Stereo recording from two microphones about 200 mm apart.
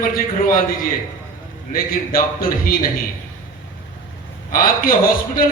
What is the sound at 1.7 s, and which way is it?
A man's voice, 45° left (ahead or behind).